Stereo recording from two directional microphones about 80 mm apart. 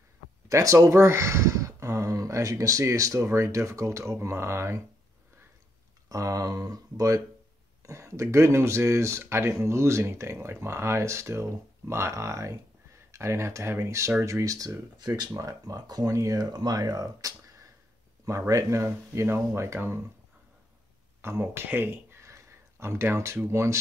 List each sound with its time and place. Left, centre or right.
0.5 s speech: right
6.0 s speech: right
15.3 s speech: right
16.4 s speech: right
18.5 s speech: right
21.2 s speech: right